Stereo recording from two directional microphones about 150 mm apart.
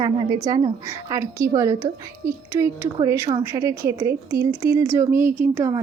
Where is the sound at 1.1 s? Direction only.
20° right (ahead or behind).